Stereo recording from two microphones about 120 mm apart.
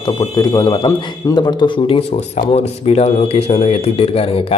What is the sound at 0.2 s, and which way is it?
Speech, 35° left (ahead or behind).